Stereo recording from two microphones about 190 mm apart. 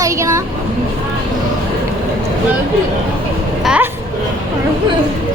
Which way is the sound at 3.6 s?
5° right (ahead or behind).